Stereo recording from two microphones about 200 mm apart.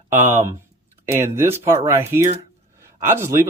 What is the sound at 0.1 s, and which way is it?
Speech, 40° right (ahead or behind).